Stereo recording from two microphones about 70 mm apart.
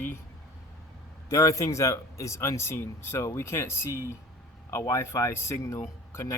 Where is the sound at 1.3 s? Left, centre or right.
Left.